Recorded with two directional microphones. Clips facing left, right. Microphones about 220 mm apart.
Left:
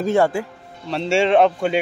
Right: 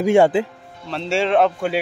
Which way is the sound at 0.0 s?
15° right (ahead or behind).